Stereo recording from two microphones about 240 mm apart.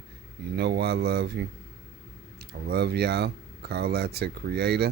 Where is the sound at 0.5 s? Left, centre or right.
Right.